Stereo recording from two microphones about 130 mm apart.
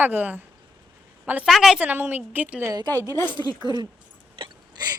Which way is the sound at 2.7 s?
30° right (ahead or behind).